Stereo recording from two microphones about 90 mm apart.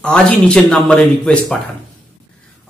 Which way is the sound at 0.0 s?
10° left (ahead or behind).